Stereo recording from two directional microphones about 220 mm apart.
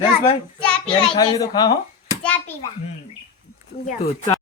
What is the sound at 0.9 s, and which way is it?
Speech, 25° left (ahead or behind).